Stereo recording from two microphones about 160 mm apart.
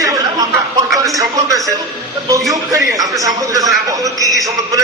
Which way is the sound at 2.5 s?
20° right (ahead or behind).